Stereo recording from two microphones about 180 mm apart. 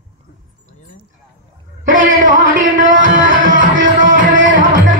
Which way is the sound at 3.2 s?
45° right (ahead or behind).